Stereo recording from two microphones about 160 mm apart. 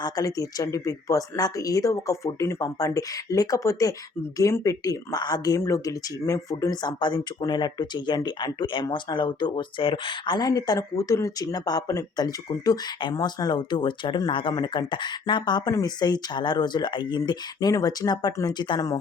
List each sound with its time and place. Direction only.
0.0 s speech: 20° left (ahead or behind)